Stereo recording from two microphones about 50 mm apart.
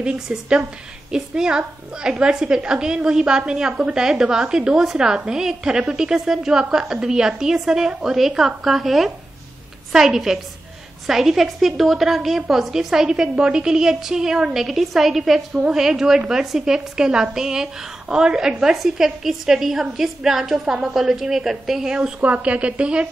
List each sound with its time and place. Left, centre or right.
0.0 s a woman's voice: centre
22.2 s a woman's voice: right